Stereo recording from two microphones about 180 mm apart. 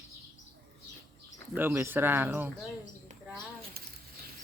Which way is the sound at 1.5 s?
15° right (ahead or behind).